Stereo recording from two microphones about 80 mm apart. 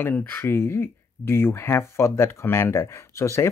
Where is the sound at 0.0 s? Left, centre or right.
Left.